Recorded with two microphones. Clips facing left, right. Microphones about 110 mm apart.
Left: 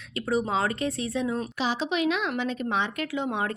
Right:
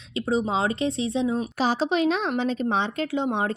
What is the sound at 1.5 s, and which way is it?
A woman's voice, 40° right (ahead or behind).